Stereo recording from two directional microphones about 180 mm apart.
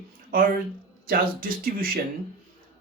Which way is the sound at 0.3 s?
50° right (ahead or behind).